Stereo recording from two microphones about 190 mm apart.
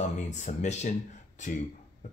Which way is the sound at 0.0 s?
40° left (ahead or behind).